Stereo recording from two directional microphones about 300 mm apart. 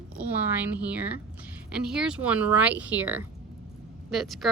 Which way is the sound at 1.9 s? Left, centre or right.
Centre.